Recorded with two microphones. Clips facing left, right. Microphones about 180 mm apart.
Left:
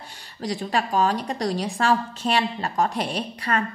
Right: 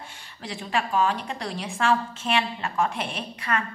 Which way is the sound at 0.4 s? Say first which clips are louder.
Left 3 dB; 40° left (ahead or behind).